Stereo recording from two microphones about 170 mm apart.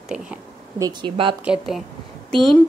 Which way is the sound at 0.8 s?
30° right (ahead or behind).